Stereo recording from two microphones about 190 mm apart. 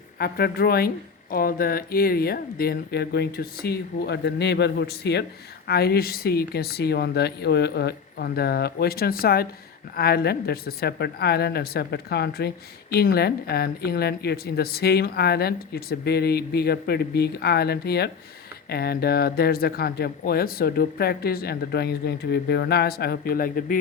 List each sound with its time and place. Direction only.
0.2 s a woman's voice: 55° left (ahead or behind)